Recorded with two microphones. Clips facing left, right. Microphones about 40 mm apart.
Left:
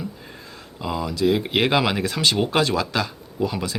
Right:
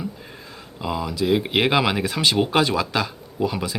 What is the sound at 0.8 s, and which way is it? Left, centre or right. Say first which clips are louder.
Speech: left 1 dB; centre.